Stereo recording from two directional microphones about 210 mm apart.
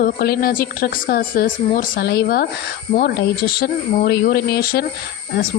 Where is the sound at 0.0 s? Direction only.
45° left (ahead or behind).